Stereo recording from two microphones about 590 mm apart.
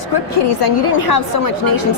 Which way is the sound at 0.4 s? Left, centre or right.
Left.